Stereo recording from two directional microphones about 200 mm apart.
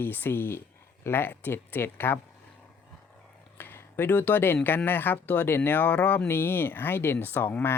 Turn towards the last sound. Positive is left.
turn(degrees=10)  # may be behind; listen again after turning